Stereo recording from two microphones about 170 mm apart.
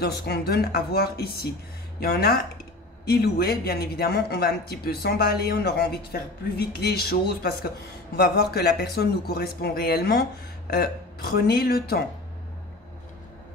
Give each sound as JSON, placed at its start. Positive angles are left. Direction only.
{"t": 0.0, "sound": "speech", "side_deg": 70}